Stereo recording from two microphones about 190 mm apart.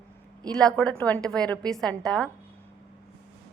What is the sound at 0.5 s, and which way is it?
A woman's voice, 5° left (ahead or behind).